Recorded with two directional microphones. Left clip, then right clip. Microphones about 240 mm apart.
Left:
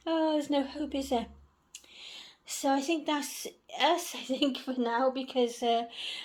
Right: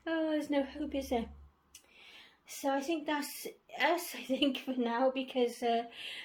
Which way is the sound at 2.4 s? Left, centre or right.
Left.